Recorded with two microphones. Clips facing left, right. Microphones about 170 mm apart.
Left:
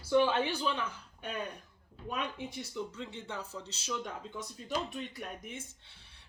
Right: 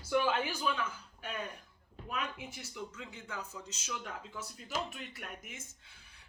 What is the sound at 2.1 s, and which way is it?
Speech, 30° left (ahead or behind).